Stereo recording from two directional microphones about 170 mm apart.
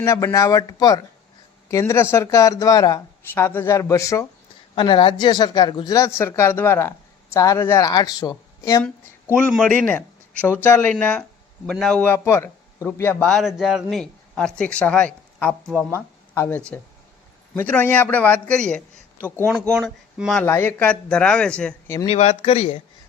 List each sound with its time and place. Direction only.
0.0 s a man's voice: 15° left (ahead or behind)
4.7 s speech: 30° left (ahead or behind)
8.8 s a man's voice: 5° left (ahead or behind)
13.2 s a man's voice: centre (ahead or behind)
20.4 s a man's voice: 15° left (ahead or behind)
22.0 s speech: 35° left (ahead or behind)